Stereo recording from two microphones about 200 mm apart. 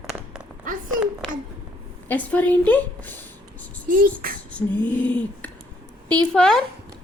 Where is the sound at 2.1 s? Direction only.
10° left (ahead or behind).